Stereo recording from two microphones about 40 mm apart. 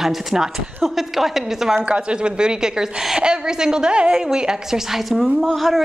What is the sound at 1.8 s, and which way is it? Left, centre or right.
A woman's voice, right.